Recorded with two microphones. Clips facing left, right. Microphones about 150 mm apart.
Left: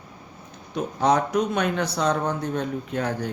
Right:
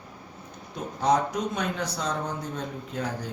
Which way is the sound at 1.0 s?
70° left (ahead or behind).